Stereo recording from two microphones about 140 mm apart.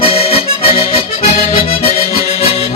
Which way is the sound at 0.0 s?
45° left (ahead or behind).